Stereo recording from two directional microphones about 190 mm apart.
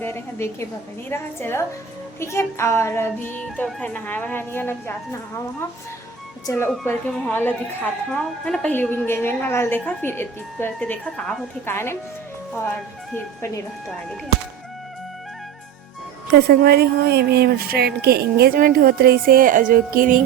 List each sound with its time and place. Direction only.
0.0 s a woman's voice: 15° left (ahead or behind)
6.8 s a woman's voice: 10° left (ahead or behind)
13.1 s a woman's voice: 15° left (ahead or behind)
16.3 s speech: 55° right (ahead or behind)